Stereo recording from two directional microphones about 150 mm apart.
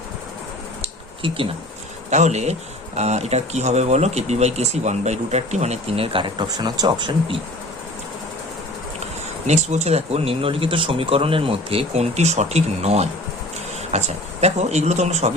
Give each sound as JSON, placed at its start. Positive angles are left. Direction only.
{"t": 0.8, "sound": "a sound", "side_deg": -35}
{"t": 2.0, "sound": "speech", "side_deg": -50}
{"t": 9.5, "sound": "speech", "side_deg": -50}